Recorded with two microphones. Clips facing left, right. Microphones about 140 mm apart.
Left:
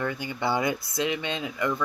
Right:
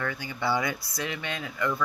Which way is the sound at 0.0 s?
20° left (ahead or behind).